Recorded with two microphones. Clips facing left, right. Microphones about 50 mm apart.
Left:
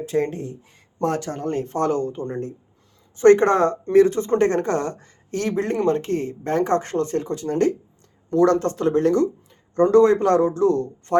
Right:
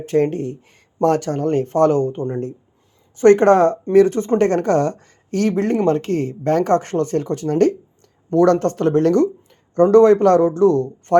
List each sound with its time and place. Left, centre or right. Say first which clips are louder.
0.0 s speech: right 5 dB; right